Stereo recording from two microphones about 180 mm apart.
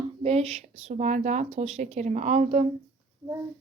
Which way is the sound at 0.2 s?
35° right (ahead or behind).